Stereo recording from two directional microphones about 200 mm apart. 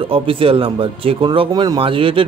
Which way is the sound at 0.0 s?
25° right (ahead or behind).